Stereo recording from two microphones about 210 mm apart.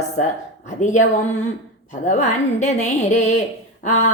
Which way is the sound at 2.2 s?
35° left (ahead or behind).